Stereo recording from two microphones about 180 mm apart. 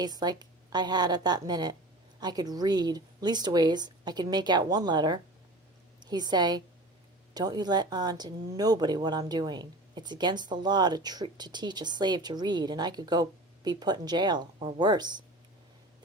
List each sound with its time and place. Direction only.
0.0 s a woman's voice: 20° right (ahead or behind)